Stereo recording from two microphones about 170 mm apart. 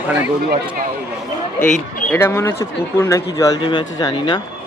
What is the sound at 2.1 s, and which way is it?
Speech, 15° left (ahead or behind).